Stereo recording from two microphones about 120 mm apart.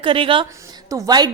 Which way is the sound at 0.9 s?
30° right (ahead or behind).